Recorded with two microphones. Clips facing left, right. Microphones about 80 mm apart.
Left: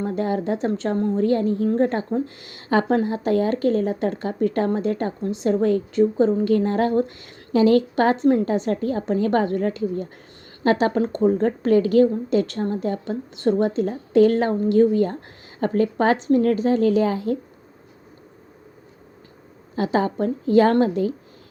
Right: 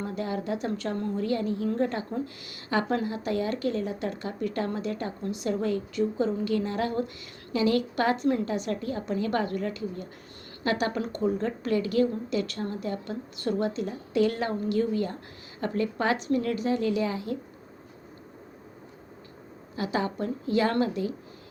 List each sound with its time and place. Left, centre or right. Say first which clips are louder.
0.0 s a woman's voice: left 8 dB; left
16.4 s a woman's voice: left 8 dB; left
19.7 s a woman's voice: left 8 dB; left